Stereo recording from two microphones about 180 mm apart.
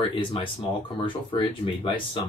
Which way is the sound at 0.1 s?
30° left (ahead or behind).